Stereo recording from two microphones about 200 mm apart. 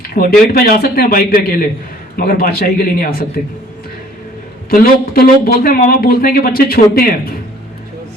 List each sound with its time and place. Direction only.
0.1 s speech: 50° left (ahead or behind)
4.7 s speech: 50° left (ahead or behind)